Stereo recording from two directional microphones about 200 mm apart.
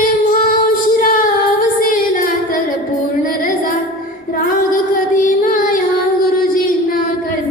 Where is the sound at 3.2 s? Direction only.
45° left (ahead or behind).